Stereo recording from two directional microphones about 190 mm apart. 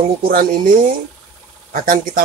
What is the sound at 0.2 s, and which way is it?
Speech, 50° right (ahead or behind).